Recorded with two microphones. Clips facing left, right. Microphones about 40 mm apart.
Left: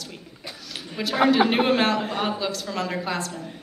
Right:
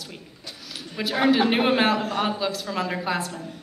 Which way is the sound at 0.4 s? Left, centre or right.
Left.